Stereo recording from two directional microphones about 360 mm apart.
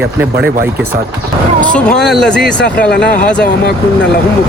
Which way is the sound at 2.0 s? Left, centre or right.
Centre.